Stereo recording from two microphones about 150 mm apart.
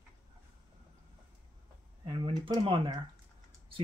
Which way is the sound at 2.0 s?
35° right (ahead or behind).